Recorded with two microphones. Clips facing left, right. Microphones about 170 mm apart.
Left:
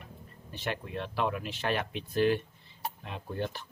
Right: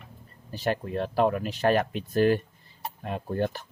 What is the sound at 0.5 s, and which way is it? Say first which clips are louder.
Speech: right 7 dB; 40° right (ahead or behind).